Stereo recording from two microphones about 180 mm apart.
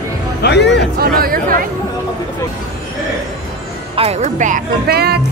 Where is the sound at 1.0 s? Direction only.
55° right (ahead or behind).